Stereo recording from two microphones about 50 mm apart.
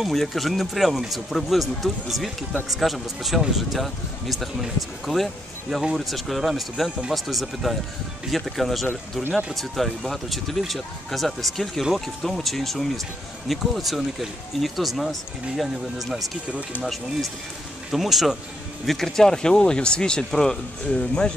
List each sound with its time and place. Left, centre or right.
0.0 s speech: centre
11.8 s speech: centre